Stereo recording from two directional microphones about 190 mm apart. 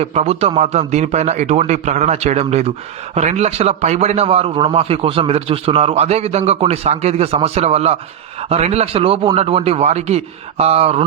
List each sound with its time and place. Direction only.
0.0 s a man's voice: 35° right (ahead or behind)